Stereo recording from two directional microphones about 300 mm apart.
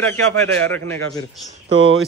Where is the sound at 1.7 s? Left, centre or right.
Right.